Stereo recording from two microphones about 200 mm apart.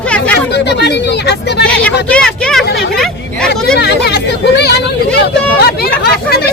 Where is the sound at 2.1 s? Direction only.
5° left (ahead or behind).